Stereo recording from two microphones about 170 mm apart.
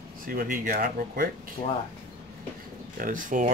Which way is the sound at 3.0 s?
50° right (ahead or behind).